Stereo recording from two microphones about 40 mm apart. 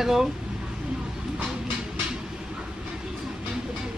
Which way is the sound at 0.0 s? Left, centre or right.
Centre.